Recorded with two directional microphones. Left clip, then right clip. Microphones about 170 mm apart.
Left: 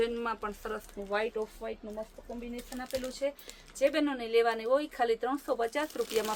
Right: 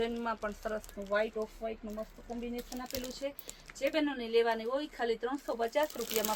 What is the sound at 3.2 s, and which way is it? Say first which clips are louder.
A woman's voice: left 6 dB; 30° left (ahead or behind).